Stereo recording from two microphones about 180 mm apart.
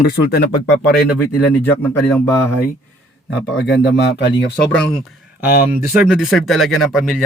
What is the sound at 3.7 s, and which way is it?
Speech, 70° left (ahead or behind).